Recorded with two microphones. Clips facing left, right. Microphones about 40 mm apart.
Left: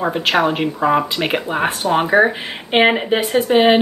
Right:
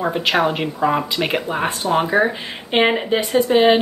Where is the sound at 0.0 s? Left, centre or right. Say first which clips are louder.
Left 1 dB; centre; by 3.6 s left.